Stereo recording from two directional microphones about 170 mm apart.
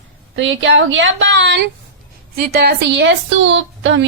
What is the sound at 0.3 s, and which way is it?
A woman's voice, 90° right.